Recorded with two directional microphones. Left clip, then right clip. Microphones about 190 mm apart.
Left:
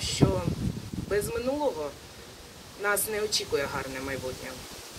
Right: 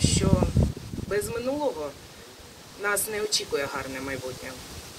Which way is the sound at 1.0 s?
25° right (ahead or behind).